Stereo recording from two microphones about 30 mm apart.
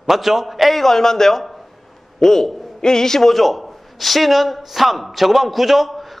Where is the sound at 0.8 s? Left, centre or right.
Centre.